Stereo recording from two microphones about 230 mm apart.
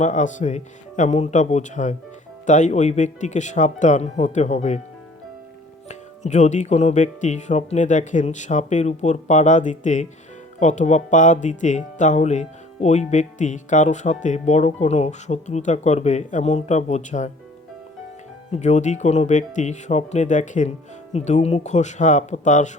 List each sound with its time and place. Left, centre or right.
0.0 s speech: left
5.9 s speech: left
18.5 s speech: left